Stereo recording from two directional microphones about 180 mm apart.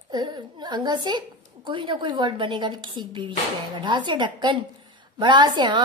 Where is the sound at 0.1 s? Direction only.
25° right (ahead or behind).